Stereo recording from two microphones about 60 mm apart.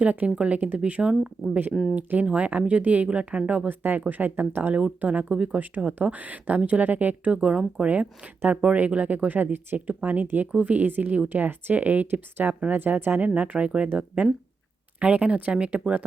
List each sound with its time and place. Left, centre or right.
0.0 s speech: right
1.7 s speech: centre
2.0 s speech: right
3.7 s speech: right
5.5 s speech: right
7.3 s speech: centre